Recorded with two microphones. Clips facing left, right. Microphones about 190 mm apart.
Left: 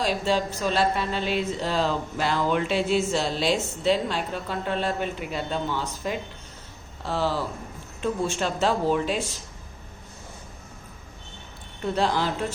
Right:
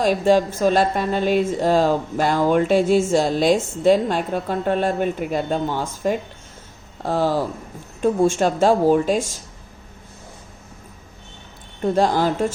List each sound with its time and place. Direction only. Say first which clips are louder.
0.0 s a woman's voice: right 8 dB; 50° right (ahead or behind)
11.8 s a woman's voice: right 6 dB; 45° right (ahead or behind)